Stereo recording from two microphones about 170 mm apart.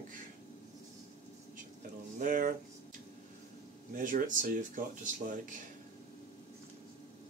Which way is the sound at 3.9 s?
50° right (ahead or behind).